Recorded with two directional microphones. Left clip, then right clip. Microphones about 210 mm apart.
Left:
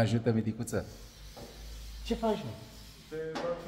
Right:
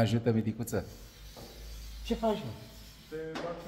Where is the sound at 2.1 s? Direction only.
15° right (ahead or behind).